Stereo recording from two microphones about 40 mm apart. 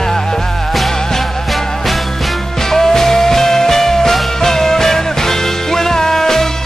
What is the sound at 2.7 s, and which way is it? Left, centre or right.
Music, centre.